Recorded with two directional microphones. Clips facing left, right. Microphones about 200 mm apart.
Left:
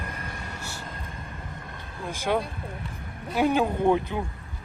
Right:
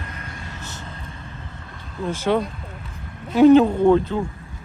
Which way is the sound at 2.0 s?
15° left (ahead or behind).